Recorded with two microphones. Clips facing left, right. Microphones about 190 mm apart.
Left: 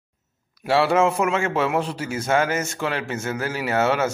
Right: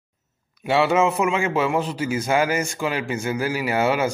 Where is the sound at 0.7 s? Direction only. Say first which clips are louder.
Even; 5° right (ahead or behind).